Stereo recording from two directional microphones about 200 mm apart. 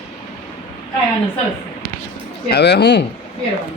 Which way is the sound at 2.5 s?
55° left (ahead or behind).